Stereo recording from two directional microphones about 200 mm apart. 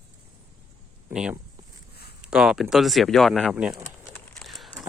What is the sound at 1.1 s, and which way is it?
Speech, 5° right (ahead or behind).